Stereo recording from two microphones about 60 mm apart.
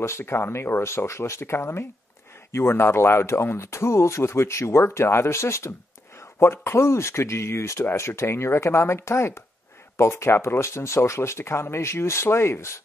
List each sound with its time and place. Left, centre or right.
0.0 s speech: left